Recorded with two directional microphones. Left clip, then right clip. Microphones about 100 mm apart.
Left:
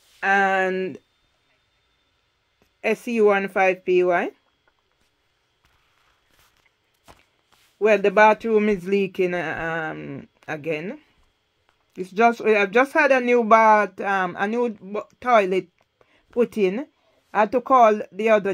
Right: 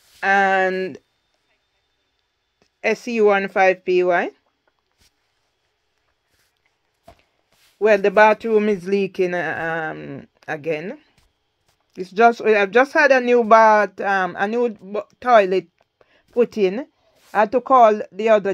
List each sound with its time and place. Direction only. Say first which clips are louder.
0.2 s speech: right 3 dB; 35° right (ahead or behind)
2.6 s speech: right 3 dB; 30° right (ahead or behind)
7.8 s speech: right 2 dB; 30° right (ahead or behind)
8.5 s speech: right 2 dB; 20° right (ahead or behind)